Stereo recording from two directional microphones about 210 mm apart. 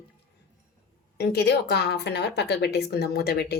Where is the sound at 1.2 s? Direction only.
50° left (ahead or behind).